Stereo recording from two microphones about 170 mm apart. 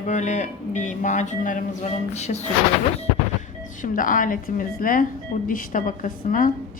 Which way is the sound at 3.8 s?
50° left (ahead or behind).